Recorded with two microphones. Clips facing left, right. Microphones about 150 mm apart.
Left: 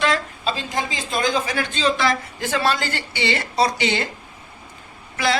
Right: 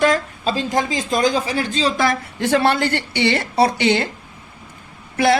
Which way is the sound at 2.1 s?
65° right (ahead or behind).